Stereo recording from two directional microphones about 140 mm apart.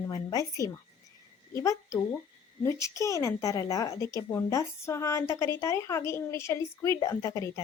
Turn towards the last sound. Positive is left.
turn(degrees=20)  # may be behind; listen again after turning